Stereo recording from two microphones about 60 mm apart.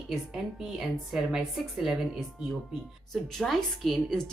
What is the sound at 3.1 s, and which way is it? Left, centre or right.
Speech, centre.